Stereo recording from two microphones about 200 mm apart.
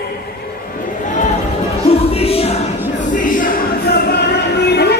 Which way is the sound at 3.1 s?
40° left (ahead or behind).